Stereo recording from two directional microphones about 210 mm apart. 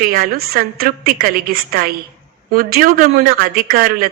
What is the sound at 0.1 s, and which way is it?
A man's voice, 45° right (ahead or behind).